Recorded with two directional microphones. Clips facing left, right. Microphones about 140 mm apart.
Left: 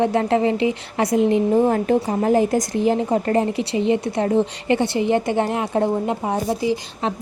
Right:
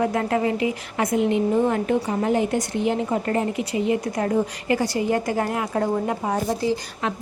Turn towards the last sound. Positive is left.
turn(degrees=20)  # may be behind; listen again after turning